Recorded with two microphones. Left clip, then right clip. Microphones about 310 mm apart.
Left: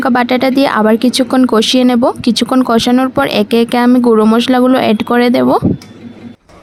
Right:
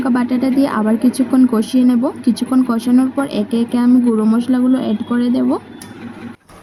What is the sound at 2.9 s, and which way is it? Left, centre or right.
Speech, left.